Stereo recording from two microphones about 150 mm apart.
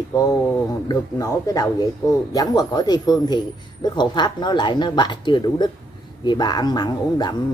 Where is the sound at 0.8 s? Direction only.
25° left (ahead or behind).